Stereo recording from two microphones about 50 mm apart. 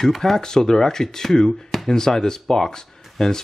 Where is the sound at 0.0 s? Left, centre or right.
Centre.